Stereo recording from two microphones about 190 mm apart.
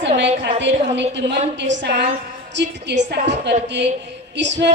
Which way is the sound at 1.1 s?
70° right (ahead or behind).